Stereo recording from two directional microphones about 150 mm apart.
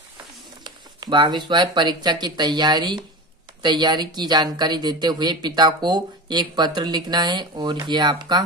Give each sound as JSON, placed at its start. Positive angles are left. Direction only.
{"t": 0.7, "sound": "speech", "side_deg": -30}